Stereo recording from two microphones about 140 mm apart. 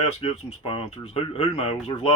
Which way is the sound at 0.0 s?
45° left (ahead or behind).